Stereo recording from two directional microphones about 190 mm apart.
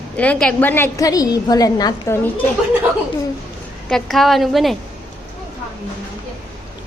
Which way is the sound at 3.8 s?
Centre (ahead or behind).